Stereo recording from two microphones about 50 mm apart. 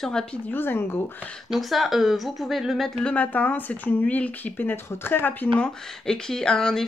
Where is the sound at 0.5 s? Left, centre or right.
Left.